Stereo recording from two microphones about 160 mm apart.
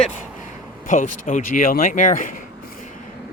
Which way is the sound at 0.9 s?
55° left (ahead or behind).